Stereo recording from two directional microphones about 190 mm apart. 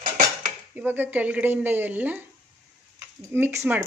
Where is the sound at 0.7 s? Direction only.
10° right (ahead or behind).